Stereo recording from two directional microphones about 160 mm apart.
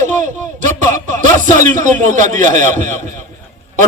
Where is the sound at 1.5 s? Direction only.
50° right (ahead or behind).